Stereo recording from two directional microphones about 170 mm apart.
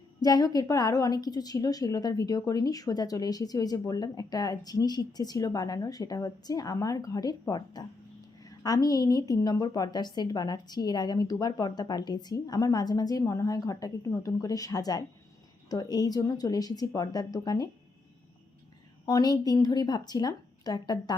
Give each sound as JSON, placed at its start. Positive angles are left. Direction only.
{"t": 0.2, "sound": "a woman's voice", "side_deg": 20}
{"t": 19.0, "sound": "a woman's voice", "side_deg": 20}